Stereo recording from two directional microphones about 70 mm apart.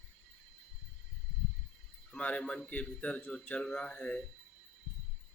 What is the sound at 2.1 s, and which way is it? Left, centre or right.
A man's voice, centre.